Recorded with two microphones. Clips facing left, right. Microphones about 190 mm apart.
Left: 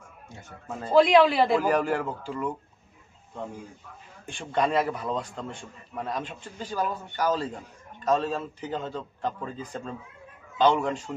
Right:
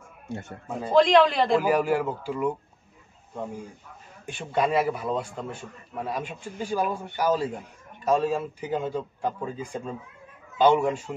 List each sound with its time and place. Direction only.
0.3 s a man's voice: 65° right (ahead or behind)
0.9 s speech: 5° left (ahead or behind)
1.6 s a man's voice: 10° right (ahead or behind)
4.3 s a man's voice: 5° right (ahead or behind)